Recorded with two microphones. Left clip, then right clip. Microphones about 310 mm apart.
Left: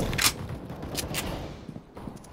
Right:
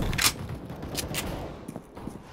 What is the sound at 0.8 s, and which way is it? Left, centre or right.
Fusillade, centre.